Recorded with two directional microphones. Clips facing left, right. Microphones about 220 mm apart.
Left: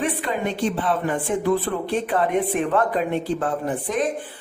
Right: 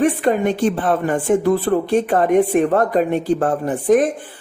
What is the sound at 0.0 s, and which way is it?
Speech, 45° right (ahead or behind).